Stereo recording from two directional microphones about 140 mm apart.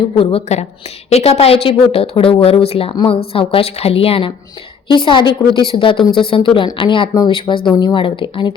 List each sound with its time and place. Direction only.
0.2 s speech: 40° left (ahead or behind)